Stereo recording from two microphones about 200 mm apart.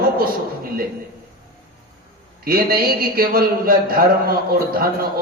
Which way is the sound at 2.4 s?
50° right (ahead or behind).